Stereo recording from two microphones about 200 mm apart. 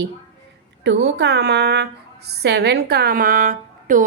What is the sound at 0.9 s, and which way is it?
A woman's voice, 55° right (ahead or behind).